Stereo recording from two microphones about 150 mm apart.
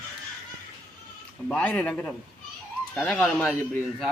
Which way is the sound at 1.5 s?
10° left (ahead or behind).